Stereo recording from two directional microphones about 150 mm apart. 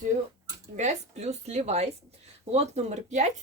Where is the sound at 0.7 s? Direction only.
50° right (ahead or behind).